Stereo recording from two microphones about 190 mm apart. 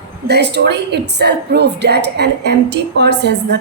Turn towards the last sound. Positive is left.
turn(degrees=-60)  # may be behind; listen again after turning